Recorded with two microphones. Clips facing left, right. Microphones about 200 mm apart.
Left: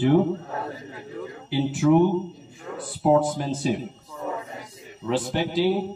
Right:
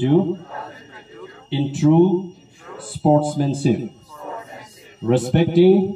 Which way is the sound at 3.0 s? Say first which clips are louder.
Right 4 dB; 30° right (ahead or behind).